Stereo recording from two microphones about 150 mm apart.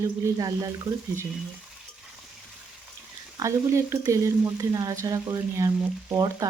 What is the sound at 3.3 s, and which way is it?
Speech, 20° right (ahead or behind).